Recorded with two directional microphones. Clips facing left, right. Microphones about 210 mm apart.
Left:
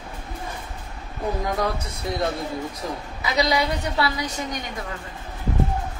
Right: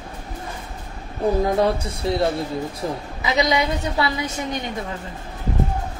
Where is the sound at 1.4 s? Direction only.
30° right (ahead or behind).